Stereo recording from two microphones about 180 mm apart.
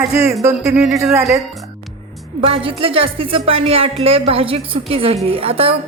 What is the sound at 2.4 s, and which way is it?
Speech, 30° right (ahead or behind).